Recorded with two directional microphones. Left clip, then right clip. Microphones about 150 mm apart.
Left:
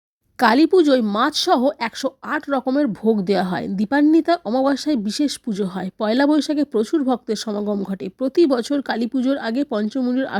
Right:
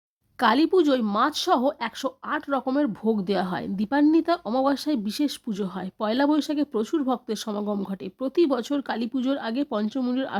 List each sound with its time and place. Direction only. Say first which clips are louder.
0.3 s speech: left 6 dB; 30° left (ahead or behind)